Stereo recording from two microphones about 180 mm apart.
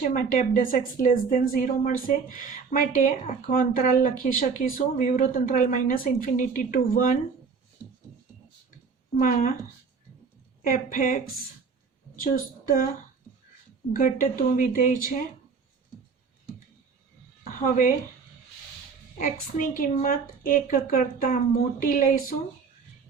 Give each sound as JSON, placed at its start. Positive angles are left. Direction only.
{"t": 0.0, "sound": "speech", "side_deg": 45}
{"t": 9.1, "sound": "speech", "side_deg": 45}
{"t": 10.6, "sound": "speech", "side_deg": 50}
{"t": 12.2, "sound": "speech", "side_deg": 50}
{"t": 13.9, "sound": "speech", "side_deg": 50}
{"t": 17.5, "sound": "speech", "side_deg": 50}
{"t": 19.2, "sound": "speech", "side_deg": 50}